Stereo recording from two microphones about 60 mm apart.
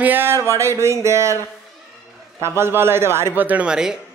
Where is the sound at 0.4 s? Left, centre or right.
Right.